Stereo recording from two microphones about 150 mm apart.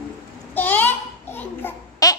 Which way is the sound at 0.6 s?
10° left (ahead or behind).